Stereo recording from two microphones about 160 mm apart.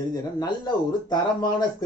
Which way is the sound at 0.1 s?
25° left (ahead or behind).